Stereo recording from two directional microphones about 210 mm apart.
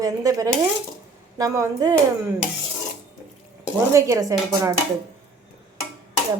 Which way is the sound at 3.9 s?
15° right (ahead or behind).